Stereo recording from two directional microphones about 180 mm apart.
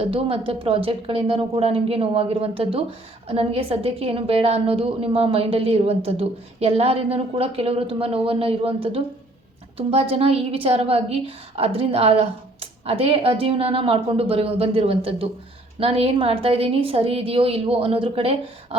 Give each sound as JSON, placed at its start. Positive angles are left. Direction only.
{"t": 0.0, "sound": "a woman's voice", "side_deg": -30}